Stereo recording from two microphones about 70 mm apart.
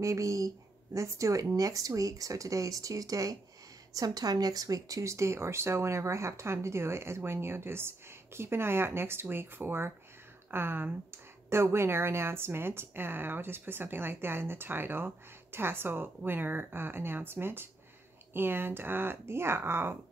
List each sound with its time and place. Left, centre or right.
0.0 s speech: right